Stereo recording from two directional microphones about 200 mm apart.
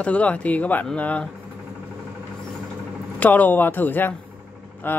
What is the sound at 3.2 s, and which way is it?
Speech, 10° left (ahead or behind).